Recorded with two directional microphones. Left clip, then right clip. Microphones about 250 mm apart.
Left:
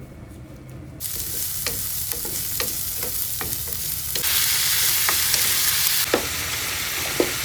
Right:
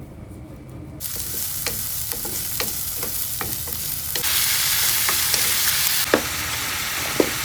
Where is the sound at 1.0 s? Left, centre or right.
Centre.